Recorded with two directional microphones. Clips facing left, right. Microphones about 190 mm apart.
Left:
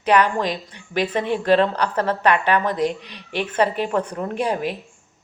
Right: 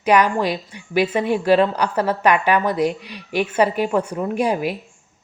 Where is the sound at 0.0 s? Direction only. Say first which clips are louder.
Right 2 dB; 10° right (ahead or behind).